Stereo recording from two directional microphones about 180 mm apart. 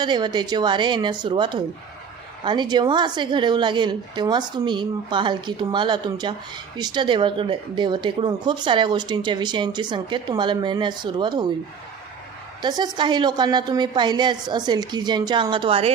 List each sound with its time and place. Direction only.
0.0 s speech: 25° right (ahead or behind)
12.6 s speech: 25° right (ahead or behind)